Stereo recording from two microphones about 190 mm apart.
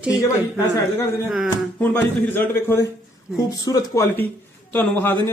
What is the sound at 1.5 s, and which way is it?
A man's voice, 10° left (ahead or behind).